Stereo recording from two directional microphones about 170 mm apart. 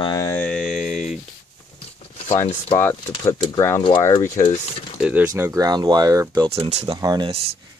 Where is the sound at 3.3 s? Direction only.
15° left (ahead or behind).